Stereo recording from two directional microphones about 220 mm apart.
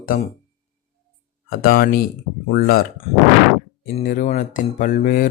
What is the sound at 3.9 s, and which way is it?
Speech, 35° left (ahead or behind).